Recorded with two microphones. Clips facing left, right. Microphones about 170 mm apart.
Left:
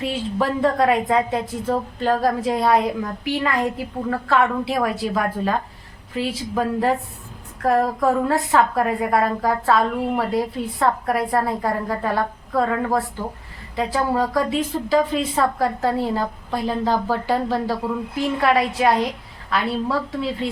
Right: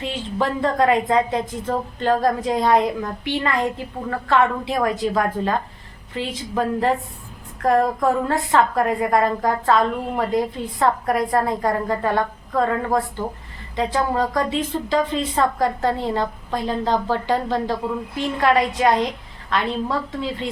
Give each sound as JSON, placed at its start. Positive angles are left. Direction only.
{"t": 0.0, "sound": "a woman's voice", "side_deg": 5}